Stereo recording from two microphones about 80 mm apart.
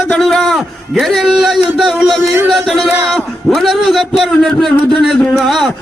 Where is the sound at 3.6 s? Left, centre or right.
Centre.